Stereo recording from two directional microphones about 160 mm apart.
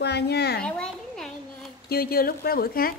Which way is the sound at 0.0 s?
90° left.